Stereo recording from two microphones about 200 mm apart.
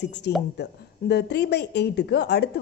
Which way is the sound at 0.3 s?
55° left (ahead or behind).